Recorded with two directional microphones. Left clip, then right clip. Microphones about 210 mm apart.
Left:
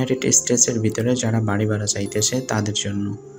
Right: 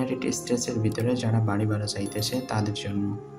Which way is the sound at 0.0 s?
15° left (ahead or behind).